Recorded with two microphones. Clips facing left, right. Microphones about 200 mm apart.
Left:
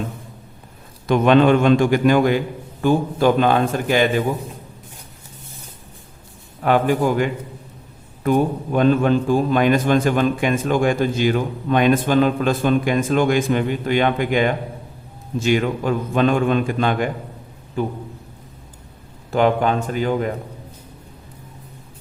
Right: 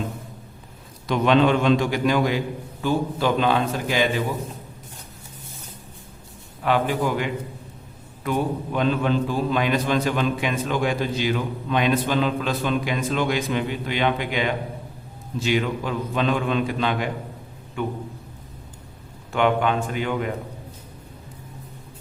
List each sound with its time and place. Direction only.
1.0 s a man's voice: 50° left (ahead or behind)
6.6 s a man's voice: 45° left (ahead or behind)
17.8 s a man's voice: 35° left (ahead or behind)
19.3 s a man's voice: 40° left (ahead or behind)